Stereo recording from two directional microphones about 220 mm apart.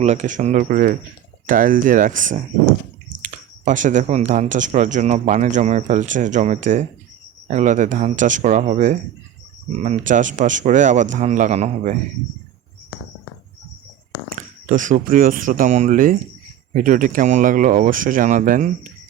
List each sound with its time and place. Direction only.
0.0 s speech: 30° right (ahead or behind)
14.3 s speech: 35° right (ahead or behind)